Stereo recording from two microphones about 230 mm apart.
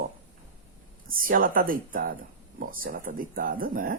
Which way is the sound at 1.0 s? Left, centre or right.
Right.